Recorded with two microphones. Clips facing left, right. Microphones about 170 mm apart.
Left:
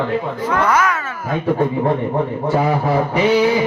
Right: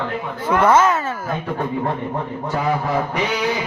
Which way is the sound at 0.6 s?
25° right (ahead or behind).